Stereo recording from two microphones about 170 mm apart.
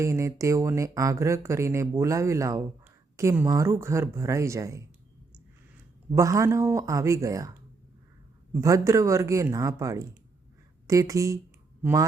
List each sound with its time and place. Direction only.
0.0 s speech: 15° right (ahead or behind)
6.1 s speech: 20° right (ahead or behind)
8.6 s speech: 20° right (ahead or behind)